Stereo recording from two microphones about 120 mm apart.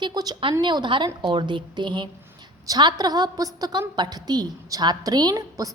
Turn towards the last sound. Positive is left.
turn(degrees=-30)  # may be behind; listen again after turning